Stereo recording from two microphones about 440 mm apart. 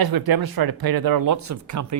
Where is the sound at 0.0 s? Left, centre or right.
Right.